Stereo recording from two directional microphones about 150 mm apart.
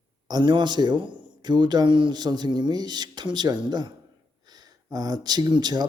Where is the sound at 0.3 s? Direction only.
30° right (ahead or behind).